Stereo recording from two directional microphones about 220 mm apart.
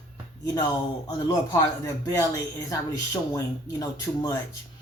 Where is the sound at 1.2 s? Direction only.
15° left (ahead or behind).